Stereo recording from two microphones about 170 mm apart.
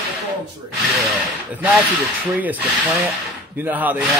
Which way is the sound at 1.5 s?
10° right (ahead or behind).